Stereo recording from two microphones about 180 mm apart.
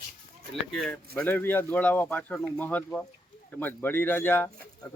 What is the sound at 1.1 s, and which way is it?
Speech, 10° left (ahead or behind).